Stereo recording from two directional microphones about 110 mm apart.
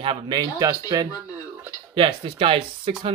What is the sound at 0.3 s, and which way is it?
Speech, 40° right (ahead or behind).